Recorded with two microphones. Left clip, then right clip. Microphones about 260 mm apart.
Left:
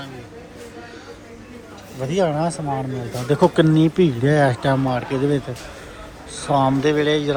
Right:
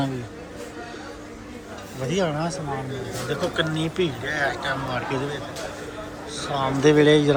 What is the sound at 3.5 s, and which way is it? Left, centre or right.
A man's voice, centre.